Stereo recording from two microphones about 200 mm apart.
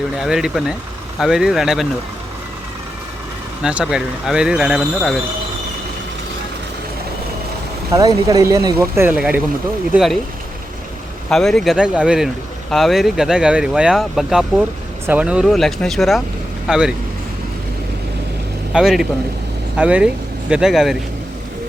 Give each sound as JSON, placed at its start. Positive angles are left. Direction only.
{"t": 0.2, "sound": "speech", "side_deg": 0}
{"t": 3.6, "sound": "speech", "side_deg": -5}
{"t": 7.9, "sound": "speech", "side_deg": -15}
{"t": 11.3, "sound": "speech", "side_deg": 0}
{"t": 18.7, "sound": "speech", "side_deg": 0}